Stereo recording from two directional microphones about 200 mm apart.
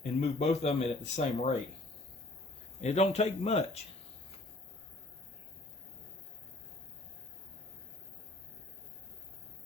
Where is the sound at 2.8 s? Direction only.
30° left (ahead or behind).